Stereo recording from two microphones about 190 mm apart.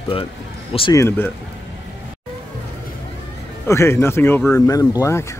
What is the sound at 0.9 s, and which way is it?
Speech, 10° left (ahead or behind).